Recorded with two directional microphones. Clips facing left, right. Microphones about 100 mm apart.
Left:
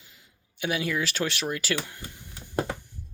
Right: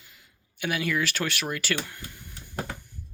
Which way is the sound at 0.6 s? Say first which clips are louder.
Even; 25° left (ahead or behind).